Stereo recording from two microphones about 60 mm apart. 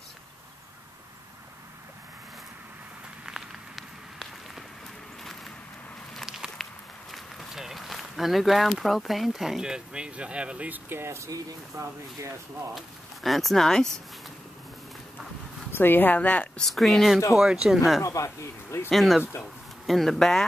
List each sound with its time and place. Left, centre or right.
3.3 s a sound: centre
6.1 s walk: centre
6.6 s run: centre; by 10.8 s right
10.9 s speech: right
11.2 s speech: right
12.7 s speech: centre
15.7 s speech: left
16.5 s speech: centre
18.0 s speech: left
18.9 s speech: centre